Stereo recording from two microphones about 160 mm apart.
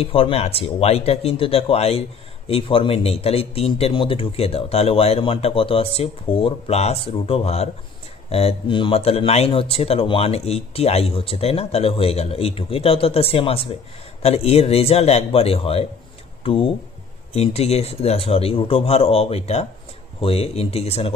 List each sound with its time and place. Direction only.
0.0 s speech: 35° left (ahead or behind)
17.3 s speech: 40° left (ahead or behind)